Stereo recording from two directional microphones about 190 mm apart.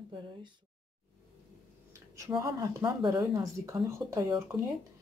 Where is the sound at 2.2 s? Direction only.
20° right (ahead or behind).